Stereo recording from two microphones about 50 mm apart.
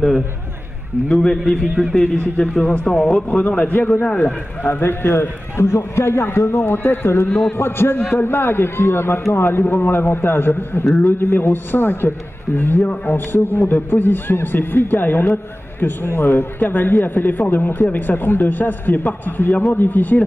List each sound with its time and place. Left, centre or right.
1.0 s a man's voice: centre
1.4 s a man's voice: centre
2.0 s a man's voice: left
2.9 s a man's voice: centre
3.3 s a man's voice: left
6.2 s a man's voice: left
7.2 s a man's voice: centre
7.5 s a man's voice: left